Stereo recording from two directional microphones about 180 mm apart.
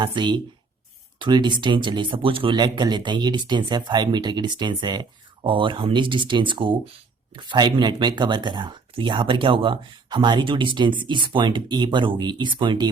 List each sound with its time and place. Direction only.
0.0 s speech: 25° right (ahead or behind)